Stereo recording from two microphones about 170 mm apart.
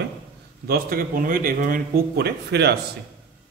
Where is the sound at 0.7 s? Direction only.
60° right (ahead or behind).